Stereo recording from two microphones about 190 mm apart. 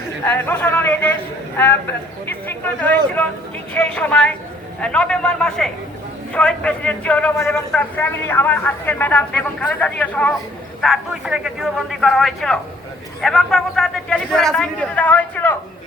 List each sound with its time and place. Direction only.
0.3 s a man's voice: 10° left (ahead or behind)